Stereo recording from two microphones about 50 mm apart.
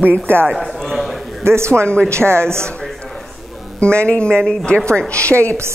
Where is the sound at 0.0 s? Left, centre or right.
Right.